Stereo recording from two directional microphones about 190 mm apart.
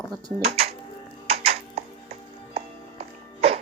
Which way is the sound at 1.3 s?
30° right (ahead or behind).